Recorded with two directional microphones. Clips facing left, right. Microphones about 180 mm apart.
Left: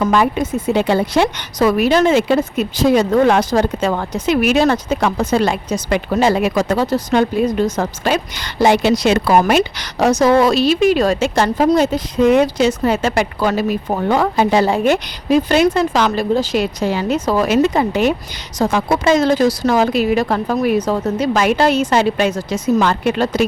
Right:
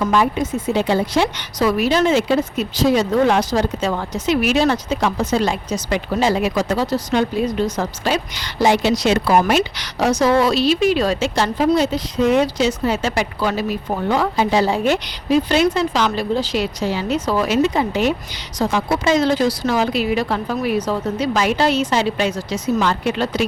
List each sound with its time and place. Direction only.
0.1 s a woman's voice: 60° left (ahead or behind)